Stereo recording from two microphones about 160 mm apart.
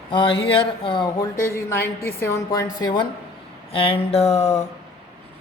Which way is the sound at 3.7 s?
35° left (ahead or behind).